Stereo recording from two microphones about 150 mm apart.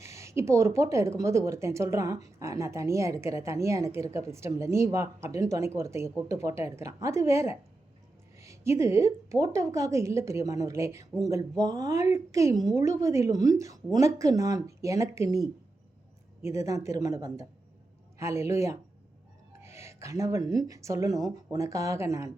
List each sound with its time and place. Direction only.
0.0 s a woman's voice: 20° right (ahead or behind)
16.4 s a woman's voice: 20° right (ahead or behind)